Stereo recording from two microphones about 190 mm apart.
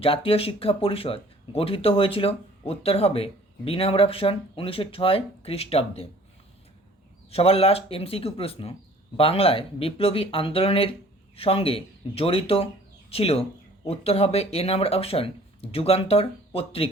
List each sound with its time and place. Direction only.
0.0 s speech: 30° left (ahead or behind)
7.3 s speech: 30° left (ahead or behind)